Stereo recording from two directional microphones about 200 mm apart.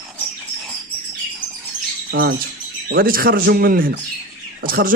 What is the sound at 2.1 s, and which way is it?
Bird, 50° right (ahead or behind).